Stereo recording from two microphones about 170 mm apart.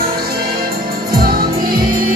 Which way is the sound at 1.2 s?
60° right (ahead or behind).